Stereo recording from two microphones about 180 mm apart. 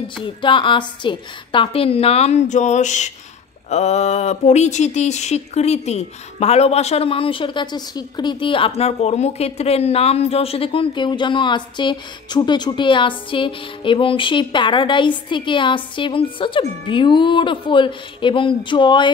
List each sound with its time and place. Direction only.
0.2 s a woman's voice: 25° left (ahead or behind)